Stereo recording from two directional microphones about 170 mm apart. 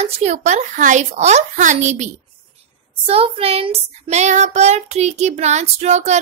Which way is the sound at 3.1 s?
35° right (ahead or behind).